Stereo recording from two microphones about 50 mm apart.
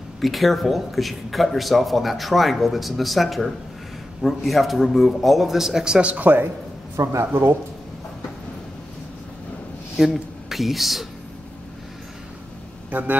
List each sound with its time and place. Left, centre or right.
0.2 s speech: centre
5.9 s speech: right
6.2 s speech: right
7.0 s speech: right
9.9 s speech: centre